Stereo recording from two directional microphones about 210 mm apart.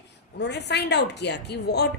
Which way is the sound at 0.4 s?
55° left (ahead or behind).